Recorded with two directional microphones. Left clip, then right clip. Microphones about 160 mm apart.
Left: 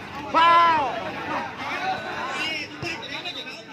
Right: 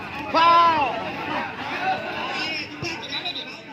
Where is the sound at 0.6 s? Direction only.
45° right (ahead or behind).